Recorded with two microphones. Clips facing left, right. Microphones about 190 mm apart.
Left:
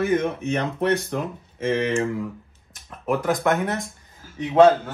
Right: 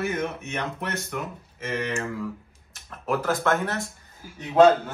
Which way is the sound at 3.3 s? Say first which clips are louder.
Left 3 dB; 15° left (ahead or behind).